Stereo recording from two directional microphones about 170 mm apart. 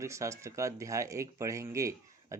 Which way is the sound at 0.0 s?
15° right (ahead or behind).